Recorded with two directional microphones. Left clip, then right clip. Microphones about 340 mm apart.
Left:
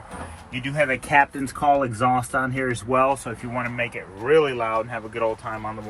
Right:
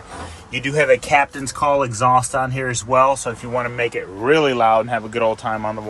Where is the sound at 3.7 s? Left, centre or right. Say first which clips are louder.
Right 6 dB; centre.